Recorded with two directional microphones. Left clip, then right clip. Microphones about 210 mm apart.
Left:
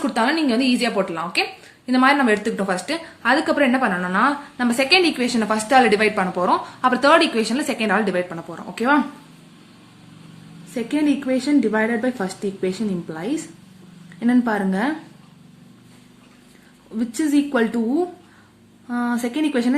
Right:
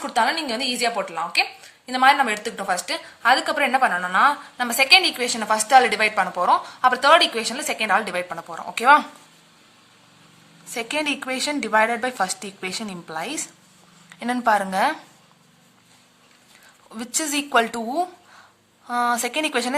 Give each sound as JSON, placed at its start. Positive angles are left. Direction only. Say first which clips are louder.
{"t": 0.0, "sound": "speech", "louder": "left 1 dB", "side_deg": -35}
{"t": 10.8, "sound": "a woman's voice", "louder": "left 3 dB", "side_deg": -50}
{"t": 16.9, "sound": "a woman's voice", "louder": "left 5 dB", "side_deg": -50}